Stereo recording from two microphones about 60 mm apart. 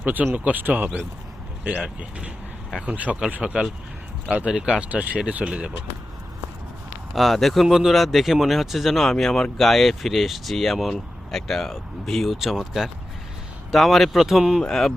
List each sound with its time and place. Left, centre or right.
0.0 s speech: right; by 4.8 s centre
4.8 s speech: right
7.1 s speech: centre
14.6 s speech: centre